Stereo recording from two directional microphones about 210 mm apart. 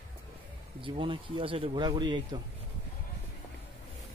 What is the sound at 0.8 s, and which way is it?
Speech, 25° right (ahead or behind).